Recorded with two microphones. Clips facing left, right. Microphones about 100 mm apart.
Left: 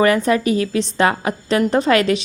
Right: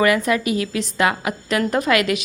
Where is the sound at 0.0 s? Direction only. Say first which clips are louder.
Left 3 dB; 35° left (ahead or behind).